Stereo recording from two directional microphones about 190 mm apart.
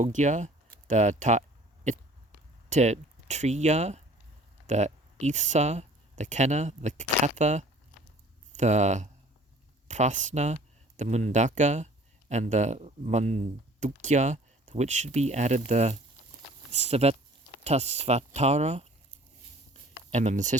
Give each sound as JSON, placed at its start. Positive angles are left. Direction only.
{"t": 0.0, "sound": "speech", "side_deg": -40}
{"t": 20.1, "sound": "speech", "side_deg": -40}